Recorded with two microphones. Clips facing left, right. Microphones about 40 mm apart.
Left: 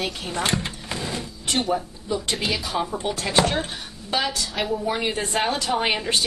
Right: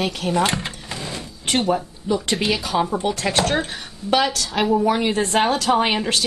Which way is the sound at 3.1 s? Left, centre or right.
Right.